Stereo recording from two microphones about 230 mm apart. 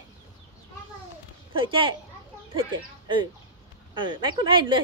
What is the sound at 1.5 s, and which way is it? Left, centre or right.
Speech, right.